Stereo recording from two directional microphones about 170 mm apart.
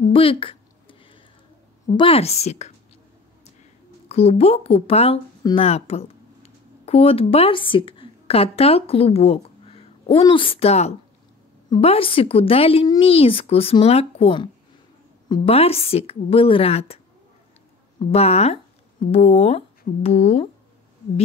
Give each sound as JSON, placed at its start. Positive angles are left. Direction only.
{"t": 0.1, "sound": "a sound", "side_deg": 35}
{"t": 2.0, "sound": "a woman's voice", "side_deg": 35}
{"t": 4.1, "sound": "a woman's voice", "side_deg": 40}